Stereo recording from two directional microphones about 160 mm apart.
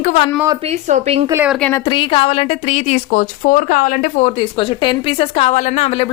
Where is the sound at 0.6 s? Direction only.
40° right (ahead or behind).